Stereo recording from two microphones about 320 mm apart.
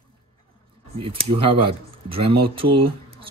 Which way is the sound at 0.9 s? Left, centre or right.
Centre.